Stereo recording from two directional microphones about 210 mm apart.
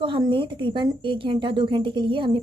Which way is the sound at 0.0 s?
25° right (ahead or behind).